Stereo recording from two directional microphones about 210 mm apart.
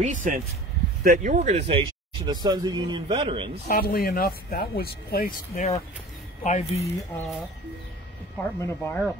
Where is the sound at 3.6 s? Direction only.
45° left (ahead or behind).